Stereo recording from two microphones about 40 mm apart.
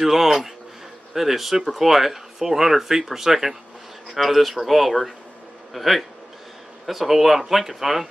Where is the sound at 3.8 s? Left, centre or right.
Centre.